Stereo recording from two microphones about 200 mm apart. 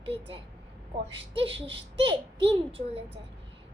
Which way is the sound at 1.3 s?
25° right (ahead or behind).